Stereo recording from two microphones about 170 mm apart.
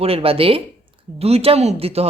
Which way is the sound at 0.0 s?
35° right (ahead or behind).